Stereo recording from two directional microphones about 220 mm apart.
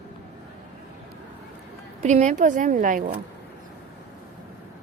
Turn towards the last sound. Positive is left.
turn(degrees=-35)  # may be behind; listen again after turning